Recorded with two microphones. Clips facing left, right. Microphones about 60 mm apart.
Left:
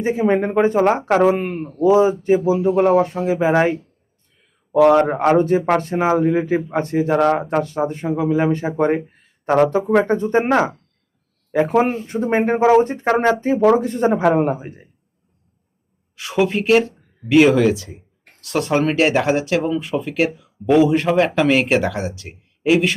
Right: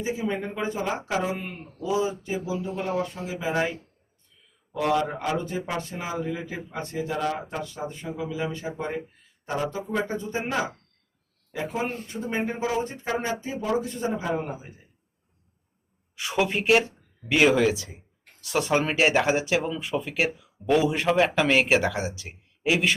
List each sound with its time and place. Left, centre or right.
0.0 s speech: left
4.9 s speech: left
16.1 s speech: centre